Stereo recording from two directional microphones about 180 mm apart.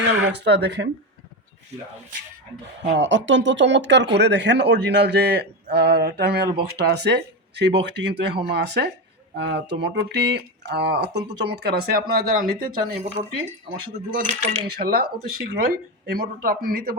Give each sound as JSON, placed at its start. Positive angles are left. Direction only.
{"t": 0.3, "sound": "speech", "side_deg": -70}
{"t": 2.9, "sound": "speech", "side_deg": -90}
{"t": 13.2, "sound": "speech", "side_deg": -35}
{"t": 14.7, "sound": "speech", "side_deg": -60}